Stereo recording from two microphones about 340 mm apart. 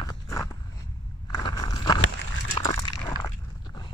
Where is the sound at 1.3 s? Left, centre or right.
Centre.